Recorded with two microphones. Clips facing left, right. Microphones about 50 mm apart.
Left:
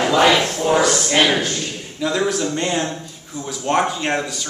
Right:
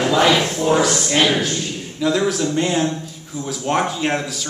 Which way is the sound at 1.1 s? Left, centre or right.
Centre.